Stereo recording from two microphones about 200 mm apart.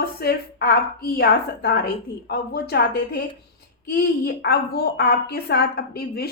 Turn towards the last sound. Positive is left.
turn(degrees=50)  # may be behind; listen again after turning